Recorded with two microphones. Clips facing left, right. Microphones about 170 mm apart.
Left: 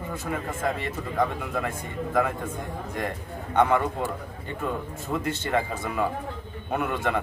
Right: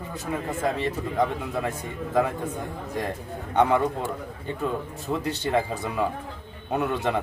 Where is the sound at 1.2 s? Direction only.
10° right (ahead or behind).